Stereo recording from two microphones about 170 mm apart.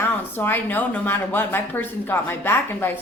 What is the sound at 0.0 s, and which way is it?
Speech, 10° left (ahead or behind).